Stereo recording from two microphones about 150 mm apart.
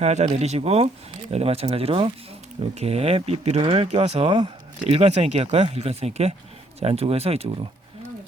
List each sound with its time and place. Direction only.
0.0 s speech: 50° right (ahead or behind)